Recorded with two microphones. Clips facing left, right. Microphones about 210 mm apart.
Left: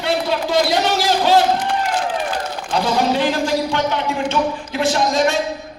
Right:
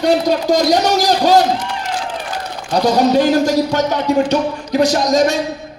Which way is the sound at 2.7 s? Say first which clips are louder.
Right 5 dB; 40° right (ahead or behind).